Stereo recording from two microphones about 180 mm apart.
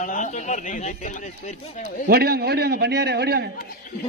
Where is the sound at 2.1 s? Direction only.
60° right (ahead or behind).